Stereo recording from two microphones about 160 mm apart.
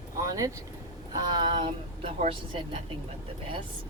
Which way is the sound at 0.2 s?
20° right (ahead or behind).